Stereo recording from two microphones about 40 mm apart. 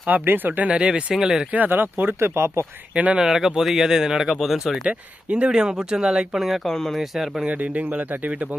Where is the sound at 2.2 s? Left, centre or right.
Right.